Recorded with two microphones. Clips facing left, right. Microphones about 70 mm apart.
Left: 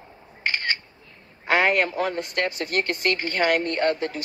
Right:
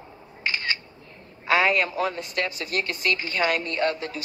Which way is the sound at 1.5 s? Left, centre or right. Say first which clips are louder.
Left 1 dB; left.